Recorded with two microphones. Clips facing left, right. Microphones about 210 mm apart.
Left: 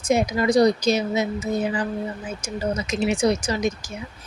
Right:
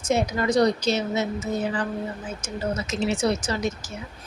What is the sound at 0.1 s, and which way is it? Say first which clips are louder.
Speech: left 3 dB; 10° left (ahead or behind).